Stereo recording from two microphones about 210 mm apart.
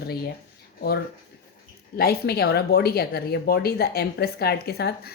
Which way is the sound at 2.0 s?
45° left (ahead or behind).